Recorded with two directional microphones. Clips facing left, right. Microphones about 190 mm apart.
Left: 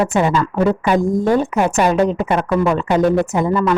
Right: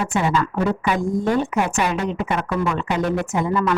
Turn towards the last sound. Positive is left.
turn(degrees=35)  # may be behind; listen again after turning